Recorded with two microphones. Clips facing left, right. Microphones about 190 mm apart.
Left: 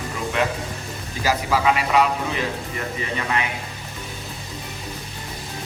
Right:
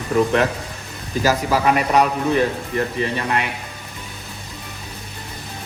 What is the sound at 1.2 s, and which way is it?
A man's voice, 45° right (ahead or behind).